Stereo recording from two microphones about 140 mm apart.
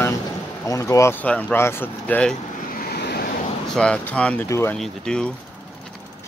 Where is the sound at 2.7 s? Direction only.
90° left.